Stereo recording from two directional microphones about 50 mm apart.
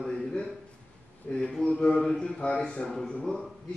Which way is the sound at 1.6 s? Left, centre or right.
Centre.